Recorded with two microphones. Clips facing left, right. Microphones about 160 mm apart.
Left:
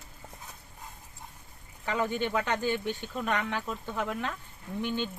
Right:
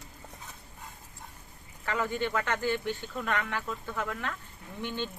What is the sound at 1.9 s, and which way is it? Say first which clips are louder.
Speech: left 1 dB; 20° left (ahead or behind).